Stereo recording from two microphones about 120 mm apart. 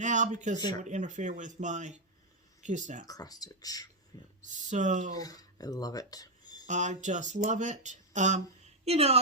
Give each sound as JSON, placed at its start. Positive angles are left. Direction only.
{"t": 0.0, "sound": "speech", "side_deg": -90}
{"t": 3.1, "sound": "speech", "side_deg": 30}
{"t": 4.4, "sound": "speech", "side_deg": -90}
{"t": 5.1, "sound": "speech", "side_deg": 30}
{"t": 6.7, "sound": "speech", "side_deg": -90}
{"t": 8.8, "sound": "a woman's voice", "side_deg": -60}